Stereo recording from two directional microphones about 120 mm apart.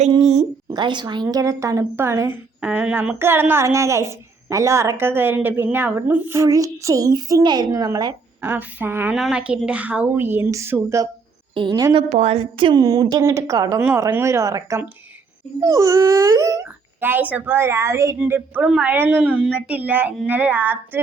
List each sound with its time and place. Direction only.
0.2 s a sound: 65° right (ahead or behind)
0.7 s a woman's voice: 40° right (ahead or behind)
8.4 s speech: 15° right (ahead or behind)
9.1 s a woman's voice: 5° right (ahead or behind); by 11.1 s 25° right (ahead or behind)
11.5 s a woman's voice: 35° right (ahead or behind)
12.0 s a woman's voice: 65° right (ahead or behind); by 12.7 s 50° right (ahead or behind)
12.7 s a woman's voice: 35° right (ahead or behind); by 19.2 s 15° right (ahead or behind)
19.2 s speech: 5° right (ahead or behind)